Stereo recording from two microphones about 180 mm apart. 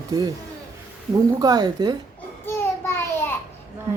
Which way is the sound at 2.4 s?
10° left (ahead or behind).